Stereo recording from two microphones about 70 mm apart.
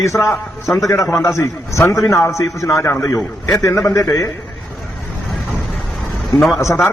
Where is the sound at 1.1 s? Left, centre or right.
Left.